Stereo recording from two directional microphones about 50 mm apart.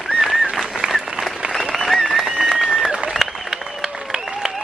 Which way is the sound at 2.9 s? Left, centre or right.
Centre.